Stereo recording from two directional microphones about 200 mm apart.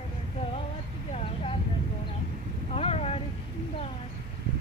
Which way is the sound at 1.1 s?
30° left (ahead or behind).